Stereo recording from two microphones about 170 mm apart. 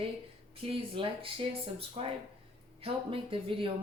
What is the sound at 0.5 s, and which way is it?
Speech, 30° right (ahead or behind).